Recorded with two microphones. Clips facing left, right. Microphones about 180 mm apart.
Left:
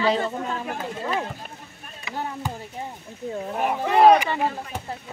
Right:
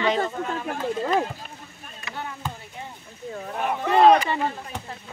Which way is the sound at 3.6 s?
10° left (ahead or behind).